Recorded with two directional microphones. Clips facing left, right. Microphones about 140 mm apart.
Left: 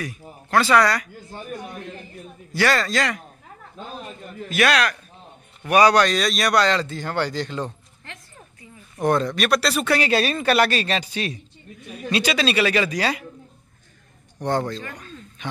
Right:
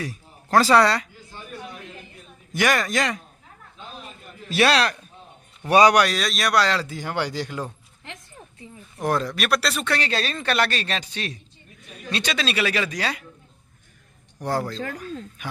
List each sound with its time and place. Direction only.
0.5 s speech: 35° right (ahead or behind)
1.1 s speech: 50° left (ahead or behind)
2.5 s speech: 15° right (ahead or behind)
3.8 s a sound: 45° left (ahead or behind)
4.5 s speech: 30° right (ahead or behind)
5.6 s speech: 20° right (ahead or behind)
6.0 s speech: centre (ahead or behind)
8.0 s a sound: 15° right (ahead or behind)
8.9 s speech: centre (ahead or behind)
14.4 s speech: 5° right (ahead or behind)